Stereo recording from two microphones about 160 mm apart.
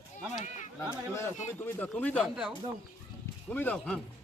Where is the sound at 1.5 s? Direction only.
10° left (ahead or behind).